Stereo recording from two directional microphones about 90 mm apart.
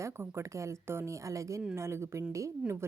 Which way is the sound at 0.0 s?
30° right (ahead or behind).